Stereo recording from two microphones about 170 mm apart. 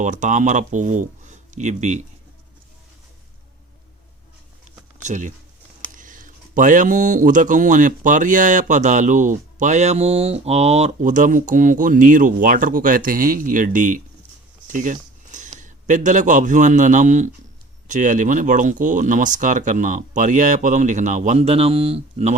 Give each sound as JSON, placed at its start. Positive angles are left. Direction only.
{"t": 0.0, "sound": "speech", "side_deg": -45}
{"t": 5.0, "sound": "speech", "side_deg": -45}